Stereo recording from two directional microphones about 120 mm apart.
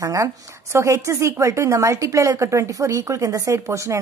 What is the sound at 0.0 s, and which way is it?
A woman's voice, 25° right (ahead or behind).